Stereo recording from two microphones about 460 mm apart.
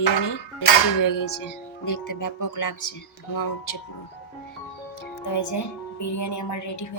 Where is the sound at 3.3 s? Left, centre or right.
Left.